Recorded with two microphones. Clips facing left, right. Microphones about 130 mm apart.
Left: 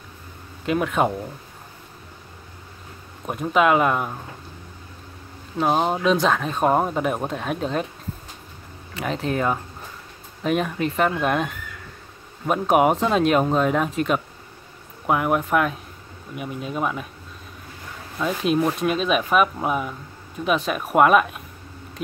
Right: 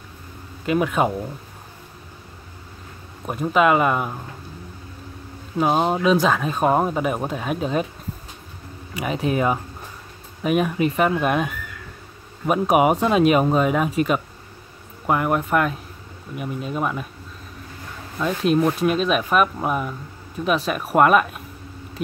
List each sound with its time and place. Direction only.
0.7 s speech: centre (ahead or behind)
3.3 s speech: centre (ahead or behind)
5.6 s speech: 5° right (ahead or behind)
8.9 s speech: 10° right (ahead or behind)
18.2 s speech: centre (ahead or behind)